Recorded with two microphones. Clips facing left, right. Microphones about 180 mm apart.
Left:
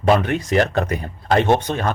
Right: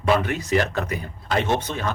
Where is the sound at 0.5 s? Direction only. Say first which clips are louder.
Left 4 dB; 60° left (ahead or behind).